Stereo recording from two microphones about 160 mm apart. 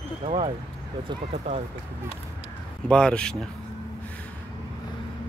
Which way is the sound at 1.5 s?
40° right (ahead or behind).